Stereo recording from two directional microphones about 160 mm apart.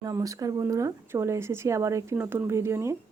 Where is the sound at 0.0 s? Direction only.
20° right (ahead or behind).